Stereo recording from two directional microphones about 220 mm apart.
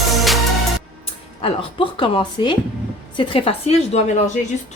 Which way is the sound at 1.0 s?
25° left (ahead or behind).